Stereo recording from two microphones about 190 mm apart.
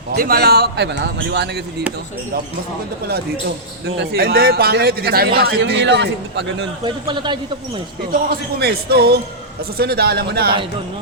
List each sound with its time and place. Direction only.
0.1 s a man's voice: 55° right (ahead or behind)
3.8 s a man's voice: 65° right (ahead or behind)
6.8 s a man's voice: 25° right (ahead or behind)
8.1 s a man's voice: 55° right (ahead or behind)